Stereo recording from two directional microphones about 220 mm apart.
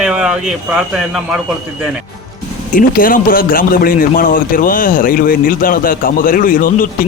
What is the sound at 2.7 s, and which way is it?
A man's voice, 40° left (ahead or behind).